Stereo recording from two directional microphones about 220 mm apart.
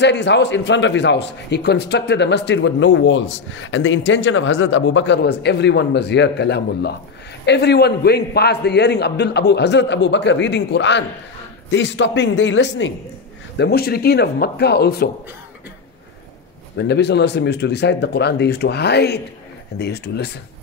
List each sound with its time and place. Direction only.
0.0 s a man's voice: 50° left (ahead or behind)
13.6 s a man's voice: 45° left (ahead or behind)
16.7 s a man's voice: 50° left (ahead or behind)